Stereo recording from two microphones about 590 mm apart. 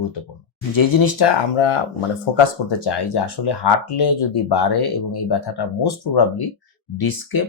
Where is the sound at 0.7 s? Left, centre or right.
Left.